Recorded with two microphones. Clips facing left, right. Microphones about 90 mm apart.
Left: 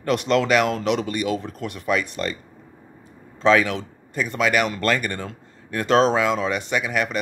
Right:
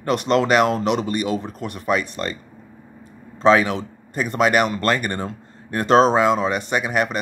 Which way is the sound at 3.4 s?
30° right (ahead or behind).